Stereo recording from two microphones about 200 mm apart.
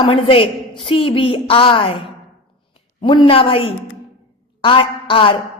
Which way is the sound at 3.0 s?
25° left (ahead or behind).